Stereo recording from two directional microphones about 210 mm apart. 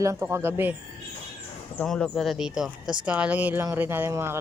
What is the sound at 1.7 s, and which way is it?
Speech, 5° left (ahead or behind).